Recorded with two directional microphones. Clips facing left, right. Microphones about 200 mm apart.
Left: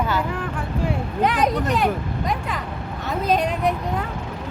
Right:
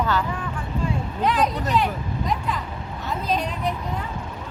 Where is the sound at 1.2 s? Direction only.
50° left (ahead or behind).